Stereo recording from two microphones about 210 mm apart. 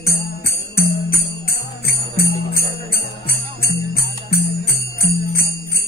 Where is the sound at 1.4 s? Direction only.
45° left (ahead or behind).